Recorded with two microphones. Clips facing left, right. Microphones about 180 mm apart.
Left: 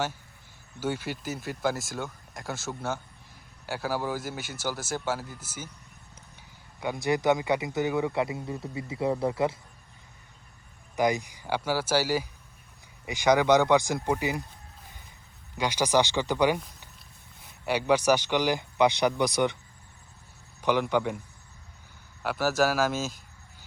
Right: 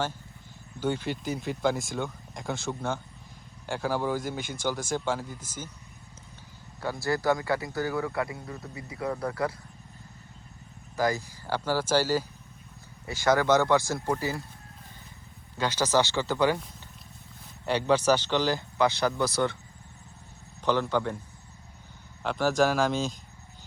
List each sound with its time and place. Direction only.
0.8 s speech: 5° left (ahead or behind)
6.7 s speech: 20° left (ahead or behind)
10.9 s speech: 15° left (ahead or behind)
15.5 s speech: 15° left (ahead or behind)
17.7 s speech: 10° left (ahead or behind)
20.6 s speech: 15° left (ahead or behind)
22.2 s speech: 5° left (ahead or behind)